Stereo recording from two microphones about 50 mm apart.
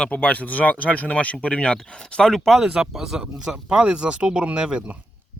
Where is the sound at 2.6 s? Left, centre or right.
Centre.